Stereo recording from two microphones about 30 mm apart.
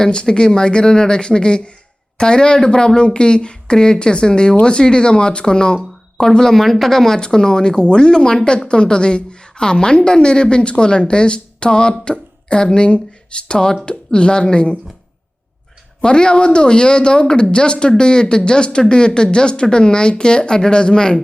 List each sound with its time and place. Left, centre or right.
0.0 s speech: left; by 7.2 s centre
7.2 s a woman's voice: left
16.0 s speech: left